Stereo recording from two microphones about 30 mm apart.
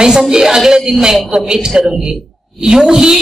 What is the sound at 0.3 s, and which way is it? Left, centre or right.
A woman's voice, centre.